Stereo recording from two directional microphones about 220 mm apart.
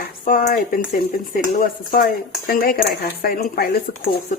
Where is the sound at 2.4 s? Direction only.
40° left (ahead or behind).